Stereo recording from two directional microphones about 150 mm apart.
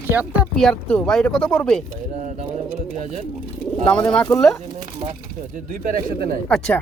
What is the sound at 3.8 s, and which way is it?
Speech, 5° left (ahead or behind).